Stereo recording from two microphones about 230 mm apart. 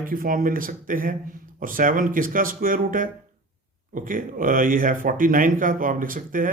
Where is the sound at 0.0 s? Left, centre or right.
Right.